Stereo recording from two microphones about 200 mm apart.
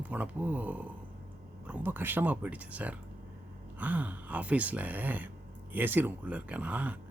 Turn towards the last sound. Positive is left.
turn(degrees=-10)  # may be behind; listen again after turning